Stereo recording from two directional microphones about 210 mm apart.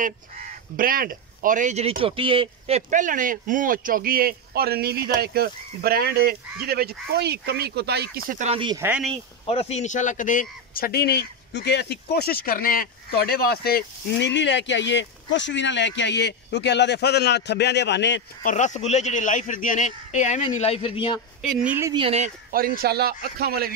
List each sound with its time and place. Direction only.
0.0 s speech: 40° right (ahead or behind); by 8.8 s 20° right (ahead or behind)
8.8 s speech: 5° right (ahead or behind)
9.5 s speech: 30° left (ahead or behind); by 18.2 s 55° left (ahead or behind)
18.4 s speech: 35° left (ahead or behind)
21.4 s speech: 5° right (ahead or behind)
21.9 s speech: 30° right (ahead or behind)
22.5 s speech: 45° right (ahead or behind)